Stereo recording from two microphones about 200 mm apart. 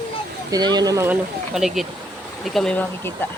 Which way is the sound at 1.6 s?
Centre (ahead or behind).